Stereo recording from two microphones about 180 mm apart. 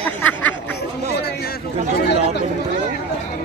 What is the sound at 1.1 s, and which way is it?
Speech, 60° left (ahead or behind).